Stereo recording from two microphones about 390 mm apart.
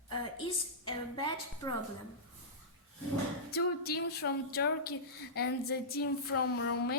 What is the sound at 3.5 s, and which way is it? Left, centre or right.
Speech, left.